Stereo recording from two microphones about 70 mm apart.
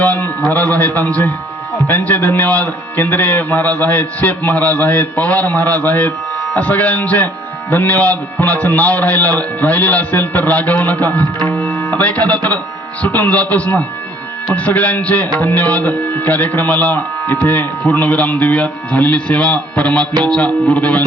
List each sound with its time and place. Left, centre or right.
0.0 s a man's voice: left